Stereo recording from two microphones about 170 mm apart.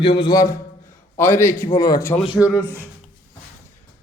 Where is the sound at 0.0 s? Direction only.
30° left (ahead or behind).